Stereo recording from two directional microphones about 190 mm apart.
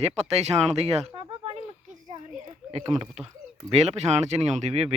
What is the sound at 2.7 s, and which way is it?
Speech, 30° right (ahead or behind).